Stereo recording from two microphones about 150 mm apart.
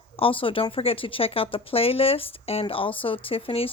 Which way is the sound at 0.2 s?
35° left (ahead or behind).